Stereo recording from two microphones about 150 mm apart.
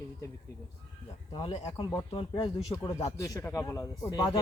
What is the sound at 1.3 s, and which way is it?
Speech, 35° left (ahead or behind).